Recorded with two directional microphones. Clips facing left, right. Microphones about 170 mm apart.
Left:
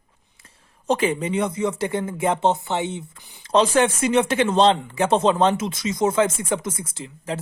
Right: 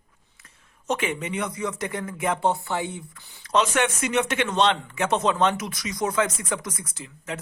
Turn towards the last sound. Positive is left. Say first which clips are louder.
# left 5 dB
turn(degrees=30)  # may be behind; listen again after turning